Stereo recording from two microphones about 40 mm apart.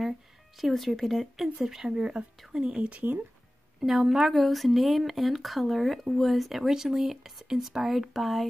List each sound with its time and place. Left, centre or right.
0.6 s speech: centre
2.0 s speech: right
2.8 s speech: right
3.8 s speech: centre